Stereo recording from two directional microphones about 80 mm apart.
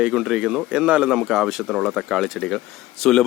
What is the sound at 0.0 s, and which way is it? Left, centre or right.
A man's voice, centre.